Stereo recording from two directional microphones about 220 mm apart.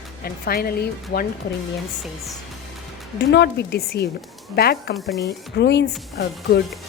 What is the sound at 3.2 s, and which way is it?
Speech, 50° left (ahead or behind).